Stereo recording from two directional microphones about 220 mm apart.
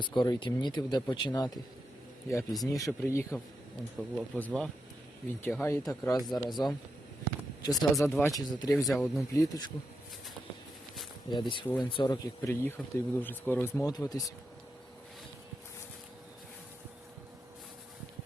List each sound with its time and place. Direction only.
0.0 s speech: 20° left (ahead or behind)
2.6 s speech: 15° left (ahead or behind)
8.9 s speech: centre (ahead or behind)
9.3 s speech: 15° left (ahead or behind)
11.3 s speech: 20° left (ahead or behind)